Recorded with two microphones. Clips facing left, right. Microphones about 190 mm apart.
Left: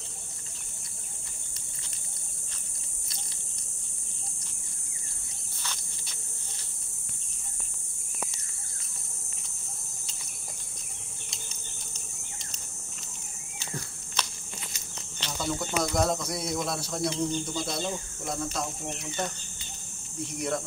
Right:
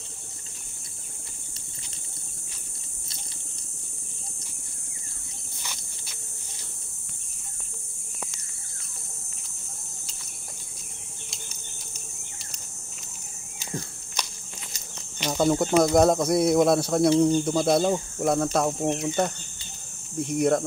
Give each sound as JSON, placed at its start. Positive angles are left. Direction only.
{"t": 14.2, "sound": "a sound", "side_deg": -10}
{"t": 15.3, "sound": "speech", "side_deg": -50}
{"t": 20.3, "sound": "speech", "side_deg": -50}